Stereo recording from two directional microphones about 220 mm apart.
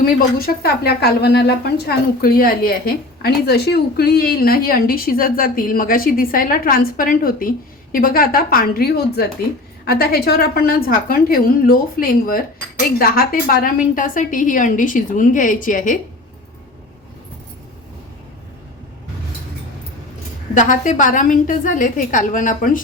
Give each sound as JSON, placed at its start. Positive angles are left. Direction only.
{"t": 0.0, "sound": "a woman's voice", "side_deg": 40}
{"t": 20.5, "sound": "a woman's voice", "side_deg": 35}